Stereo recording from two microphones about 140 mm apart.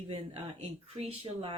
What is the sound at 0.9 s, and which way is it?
Speech, 45° right (ahead or behind).